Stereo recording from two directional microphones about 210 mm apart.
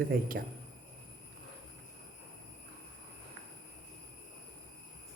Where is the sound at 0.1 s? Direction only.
45° right (ahead or behind).